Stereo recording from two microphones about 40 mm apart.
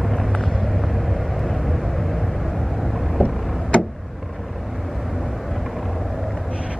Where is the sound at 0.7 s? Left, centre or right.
Centre.